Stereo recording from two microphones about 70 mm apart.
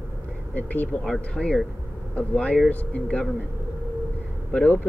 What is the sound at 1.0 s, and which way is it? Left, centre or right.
Speech, centre.